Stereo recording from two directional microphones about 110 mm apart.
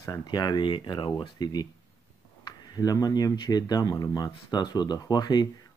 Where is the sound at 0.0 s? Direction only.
35° left (ahead or behind).